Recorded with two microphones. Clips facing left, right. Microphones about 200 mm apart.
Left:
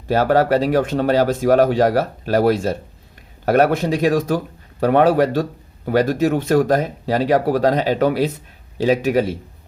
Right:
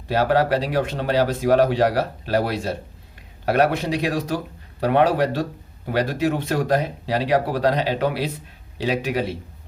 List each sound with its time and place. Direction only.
0.1 s speech: 45° left (ahead or behind)